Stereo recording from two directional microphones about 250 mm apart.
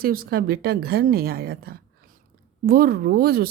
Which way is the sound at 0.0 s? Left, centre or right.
Right.